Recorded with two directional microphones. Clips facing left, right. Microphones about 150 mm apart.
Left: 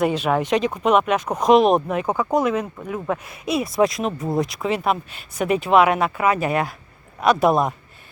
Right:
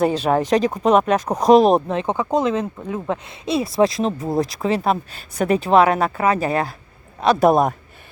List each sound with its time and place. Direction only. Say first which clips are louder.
0.0 s speech: right 2 dB; 35° right (ahead or behind)